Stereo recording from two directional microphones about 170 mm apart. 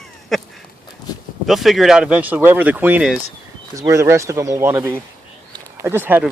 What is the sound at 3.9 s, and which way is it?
Speech, 15° right (ahead or behind).